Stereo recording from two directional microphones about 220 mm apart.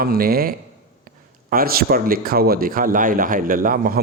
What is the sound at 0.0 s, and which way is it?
A man's voice, 45° right (ahead or behind).